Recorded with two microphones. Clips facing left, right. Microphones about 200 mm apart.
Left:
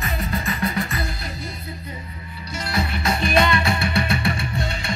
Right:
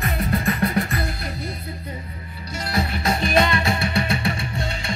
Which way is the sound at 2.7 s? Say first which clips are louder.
Right 1 dB; 45° right (ahead or behind).